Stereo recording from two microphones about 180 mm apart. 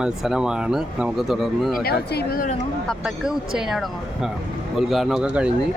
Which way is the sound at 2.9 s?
Centre (ahead or behind).